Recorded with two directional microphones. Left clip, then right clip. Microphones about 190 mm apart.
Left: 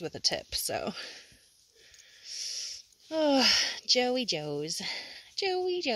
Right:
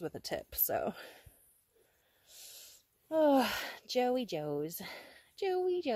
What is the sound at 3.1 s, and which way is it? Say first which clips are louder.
A woman's voice: left 3 dB; centre (ahead or behind).